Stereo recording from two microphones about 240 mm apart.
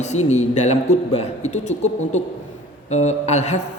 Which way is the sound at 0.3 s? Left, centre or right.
Left.